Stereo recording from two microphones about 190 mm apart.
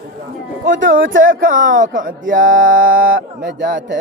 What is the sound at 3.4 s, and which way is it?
Speech, 70° right (ahead or behind).